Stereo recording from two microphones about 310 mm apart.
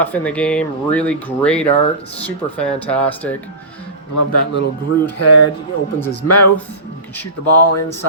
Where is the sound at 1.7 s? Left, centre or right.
Centre.